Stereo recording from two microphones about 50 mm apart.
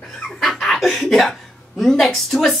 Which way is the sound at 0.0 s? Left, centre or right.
Centre.